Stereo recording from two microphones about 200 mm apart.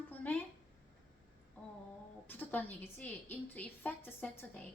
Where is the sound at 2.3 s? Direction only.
10° left (ahead or behind).